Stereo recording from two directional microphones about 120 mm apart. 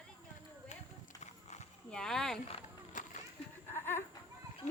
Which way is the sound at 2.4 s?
55° left (ahead or behind).